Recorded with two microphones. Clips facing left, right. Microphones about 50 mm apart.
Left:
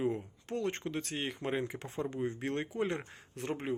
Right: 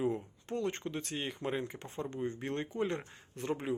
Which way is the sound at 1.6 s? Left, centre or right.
Left.